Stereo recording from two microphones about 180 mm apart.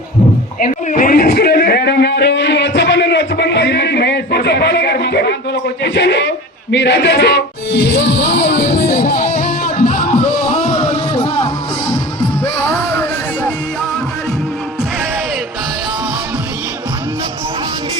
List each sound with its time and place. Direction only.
0.6 s a sound: 45° left (ahead or behind)
10.5 s music: 40° left (ahead or behind)
12.9 s music: 10° left (ahead or behind)